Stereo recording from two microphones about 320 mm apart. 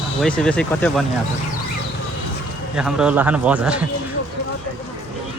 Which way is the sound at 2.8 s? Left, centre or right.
Centre.